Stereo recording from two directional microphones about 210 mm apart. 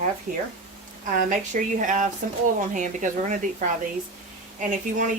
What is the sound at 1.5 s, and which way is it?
Speech, 40° right (ahead or behind).